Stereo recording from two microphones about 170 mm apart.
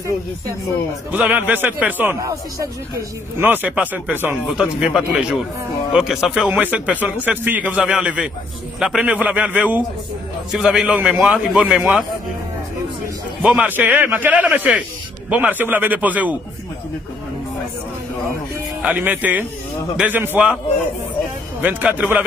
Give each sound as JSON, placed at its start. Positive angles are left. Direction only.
{"t": 1.1, "sound": "a man's voice", "side_deg": -10}
{"t": 2.1, "sound": "a man's voice", "side_deg": -20}
{"t": 13.4, "sound": "a man's voice", "side_deg": -5}
{"t": 18.8, "sound": "a man's voice", "side_deg": -10}
{"t": 21.5, "sound": "a man's voice", "side_deg": -10}